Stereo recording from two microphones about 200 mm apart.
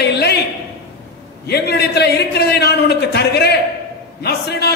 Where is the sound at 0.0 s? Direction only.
55° left (ahead or behind).